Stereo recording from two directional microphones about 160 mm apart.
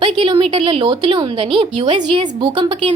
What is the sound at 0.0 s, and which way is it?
A woman's voice, 35° right (ahead or behind).